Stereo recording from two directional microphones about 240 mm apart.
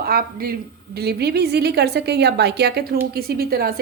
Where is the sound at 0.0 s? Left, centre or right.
Right.